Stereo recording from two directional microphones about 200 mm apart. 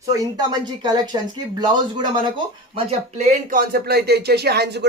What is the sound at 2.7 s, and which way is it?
Speech, 35° right (ahead or behind).